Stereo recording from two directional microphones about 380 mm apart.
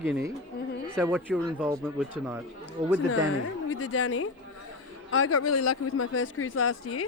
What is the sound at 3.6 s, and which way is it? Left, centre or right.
Speech, left.